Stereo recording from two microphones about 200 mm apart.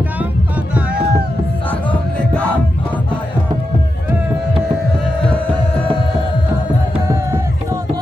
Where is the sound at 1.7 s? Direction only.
5° left (ahead or behind).